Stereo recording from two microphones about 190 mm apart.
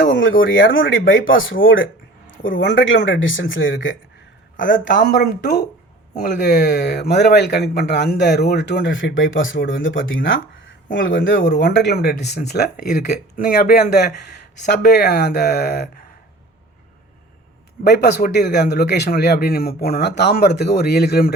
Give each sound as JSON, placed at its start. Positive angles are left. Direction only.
{"t": 0.0, "sound": "speech", "side_deg": 75}
{"t": 2.3, "sound": "speech", "side_deg": 80}
{"t": 4.6, "sound": "speech", "side_deg": 65}
{"t": 10.9, "sound": "speech", "side_deg": 65}
{"t": 17.8, "sound": "speech", "side_deg": 60}